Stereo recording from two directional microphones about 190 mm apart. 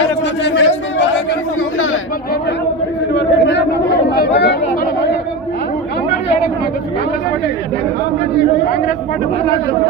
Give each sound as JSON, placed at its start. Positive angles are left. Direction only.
{"t": 0.4, "sound": "a sound", "side_deg": 65}
{"t": 3.1, "sound": "chatter", "side_deg": 65}
{"t": 4.1, "sound": "chatter", "side_deg": 55}